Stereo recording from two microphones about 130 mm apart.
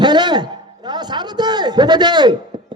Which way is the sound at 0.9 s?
35° right (ahead or behind).